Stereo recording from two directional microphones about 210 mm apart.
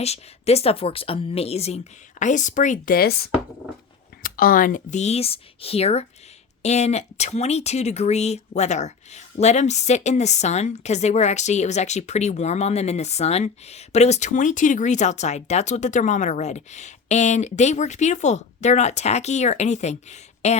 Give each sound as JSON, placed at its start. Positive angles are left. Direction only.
{"t": 0.0, "sound": "speech", "side_deg": 30}
{"t": 4.2, "sound": "speech", "side_deg": 40}